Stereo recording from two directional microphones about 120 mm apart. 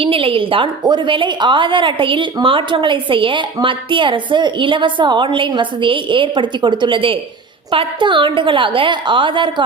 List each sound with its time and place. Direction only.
0.0 s a woman's voice: 50° right (ahead or behind)